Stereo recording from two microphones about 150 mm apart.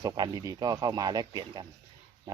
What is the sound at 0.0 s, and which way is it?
Speech, 25° right (ahead or behind).